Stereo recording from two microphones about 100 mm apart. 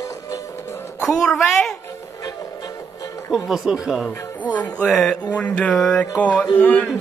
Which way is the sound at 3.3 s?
5° right (ahead or behind).